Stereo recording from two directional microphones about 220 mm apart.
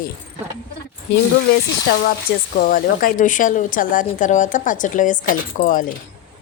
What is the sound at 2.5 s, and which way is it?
Speech, 40° left (ahead or behind).